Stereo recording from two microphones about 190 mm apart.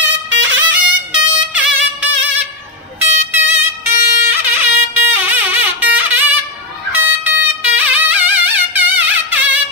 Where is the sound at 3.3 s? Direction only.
10° right (ahead or behind).